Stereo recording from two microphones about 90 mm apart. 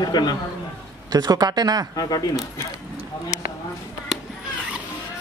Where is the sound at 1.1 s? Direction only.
45° right (ahead or behind).